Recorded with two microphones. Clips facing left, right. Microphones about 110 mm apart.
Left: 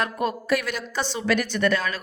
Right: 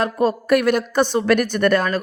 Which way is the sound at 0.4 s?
55° right (ahead or behind).